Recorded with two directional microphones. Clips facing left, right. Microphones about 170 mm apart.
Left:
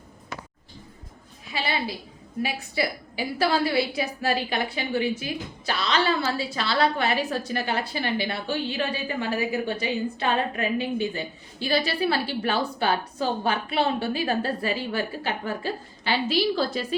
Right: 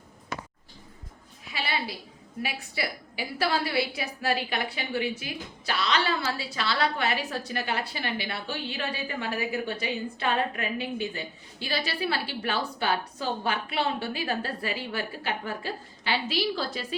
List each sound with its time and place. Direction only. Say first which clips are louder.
2.4 s a woman's voice: left 5 dB; 30° left (ahead or behind)
6.7 s a woman's voice: left 6 dB; 45° left (ahead or behind)
7.4 s a woman's voice: left 3 dB; 30° left (ahead or behind)
13.5 s a woman's voice: left 3 dB; 30° left (ahead or behind)